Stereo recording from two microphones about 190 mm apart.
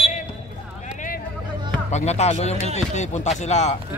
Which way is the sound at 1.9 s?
35° left (ahead or behind).